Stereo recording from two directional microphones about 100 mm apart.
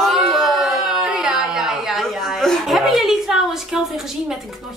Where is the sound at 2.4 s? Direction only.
Centre (ahead or behind).